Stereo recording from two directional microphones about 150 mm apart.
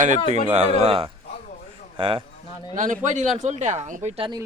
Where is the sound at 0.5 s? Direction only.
45° right (ahead or behind).